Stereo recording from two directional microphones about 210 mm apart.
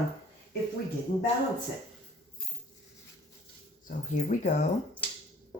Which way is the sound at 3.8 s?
35° left (ahead or behind).